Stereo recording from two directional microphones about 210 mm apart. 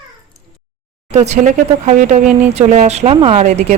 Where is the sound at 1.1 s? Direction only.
30° right (ahead or behind).